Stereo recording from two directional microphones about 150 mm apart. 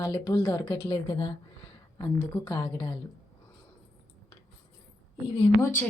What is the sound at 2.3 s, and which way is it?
Speech, 20° left (ahead or behind).